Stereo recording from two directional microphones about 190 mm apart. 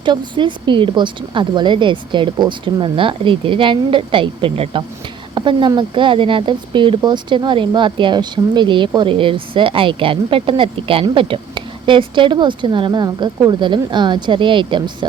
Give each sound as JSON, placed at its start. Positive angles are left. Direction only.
{"t": 0.0, "sound": "speech", "side_deg": -25}